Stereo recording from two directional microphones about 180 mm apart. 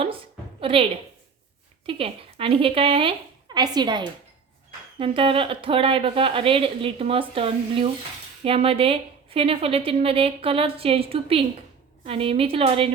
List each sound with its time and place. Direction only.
0.6 s a woman's voice: 30° right (ahead or behind)
1.9 s a woman's voice: 30° right (ahead or behind)